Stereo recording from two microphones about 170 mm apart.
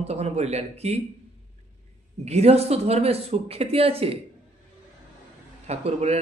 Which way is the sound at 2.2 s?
40° right (ahead or behind).